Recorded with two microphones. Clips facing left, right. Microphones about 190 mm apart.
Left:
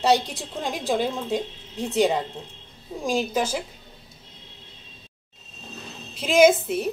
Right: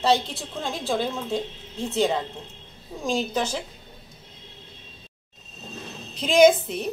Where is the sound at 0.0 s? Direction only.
15° left (ahead or behind).